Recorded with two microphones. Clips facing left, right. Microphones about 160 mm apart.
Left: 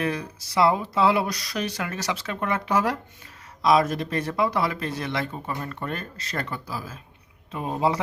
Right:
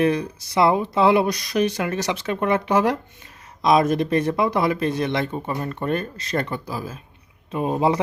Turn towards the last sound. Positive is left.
turn(degrees=-20)  # may be behind; listen again after turning